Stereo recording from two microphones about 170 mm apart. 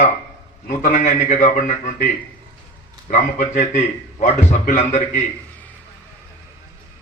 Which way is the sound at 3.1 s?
45° left (ahead or behind).